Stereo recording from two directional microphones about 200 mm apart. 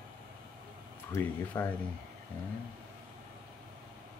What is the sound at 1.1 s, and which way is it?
Speech, 10° left (ahead or behind).